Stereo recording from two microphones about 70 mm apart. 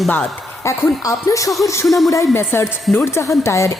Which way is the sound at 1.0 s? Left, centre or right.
Left.